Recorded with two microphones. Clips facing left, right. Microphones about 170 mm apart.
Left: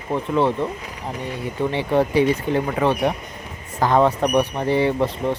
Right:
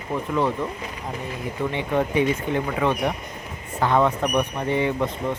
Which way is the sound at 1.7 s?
35° left (ahead or behind).